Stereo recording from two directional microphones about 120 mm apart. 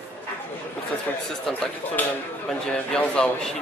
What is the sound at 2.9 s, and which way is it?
Speech, 10° left (ahead or behind).